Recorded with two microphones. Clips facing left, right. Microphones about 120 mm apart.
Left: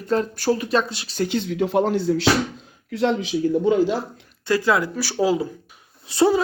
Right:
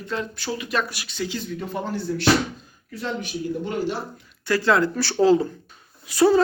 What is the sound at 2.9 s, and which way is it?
Speech, 75° left (ahead or behind).